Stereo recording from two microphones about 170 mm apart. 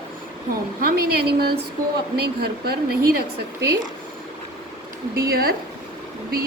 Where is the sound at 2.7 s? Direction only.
65° right (ahead or behind).